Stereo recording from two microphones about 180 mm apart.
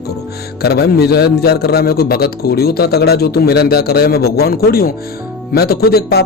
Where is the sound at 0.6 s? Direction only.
60° left (ahead or behind).